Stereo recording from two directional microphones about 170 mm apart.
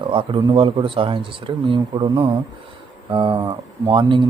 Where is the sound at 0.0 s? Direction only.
30° right (ahead or behind).